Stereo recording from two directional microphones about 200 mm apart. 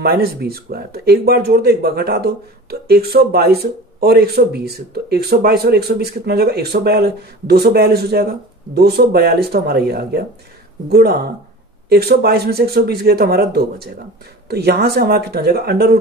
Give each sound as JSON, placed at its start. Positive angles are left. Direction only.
{"t": 0.0, "sound": "speech", "side_deg": -50}